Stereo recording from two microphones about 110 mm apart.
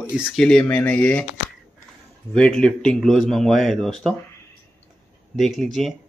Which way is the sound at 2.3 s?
5° left (ahead or behind).